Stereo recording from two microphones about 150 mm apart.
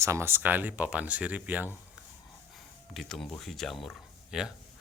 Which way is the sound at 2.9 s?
Centre (ahead or behind).